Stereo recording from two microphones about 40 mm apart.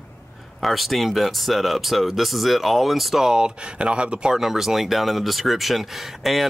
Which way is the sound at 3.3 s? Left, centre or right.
Centre.